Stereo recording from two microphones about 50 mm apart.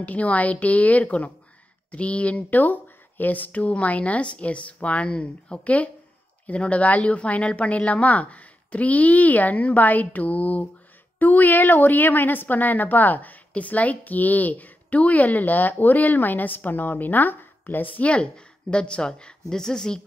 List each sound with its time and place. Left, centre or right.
0.0 s a woman's voice: left
18.0 s a woman's voice: left